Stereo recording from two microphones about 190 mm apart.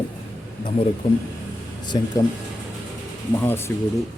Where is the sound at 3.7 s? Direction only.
10° left (ahead or behind).